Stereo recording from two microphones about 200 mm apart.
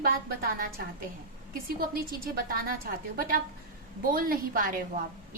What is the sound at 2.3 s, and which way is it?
A woman's voice, 45° right (ahead or behind).